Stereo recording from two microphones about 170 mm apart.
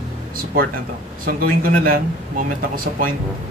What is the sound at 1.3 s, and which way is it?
Speech, 60° right (ahead or behind).